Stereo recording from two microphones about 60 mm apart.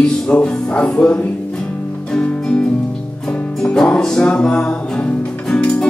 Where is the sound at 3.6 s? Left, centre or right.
Centre.